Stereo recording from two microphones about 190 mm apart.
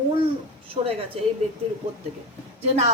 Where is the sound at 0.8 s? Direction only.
25° right (ahead or behind).